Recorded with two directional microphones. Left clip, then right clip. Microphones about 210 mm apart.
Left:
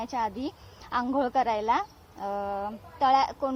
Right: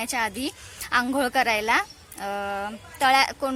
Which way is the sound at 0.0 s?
50° right (ahead or behind).